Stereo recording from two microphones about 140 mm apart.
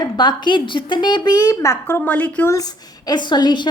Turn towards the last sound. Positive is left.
turn(degrees=30)  # may be behind; listen again after turning